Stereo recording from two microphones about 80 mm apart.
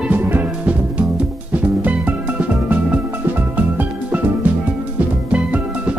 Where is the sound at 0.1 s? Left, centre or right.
Right.